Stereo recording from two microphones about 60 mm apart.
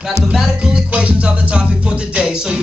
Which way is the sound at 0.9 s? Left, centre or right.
Centre.